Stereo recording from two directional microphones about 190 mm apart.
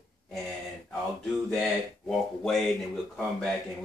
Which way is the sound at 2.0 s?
Centre (ahead or behind).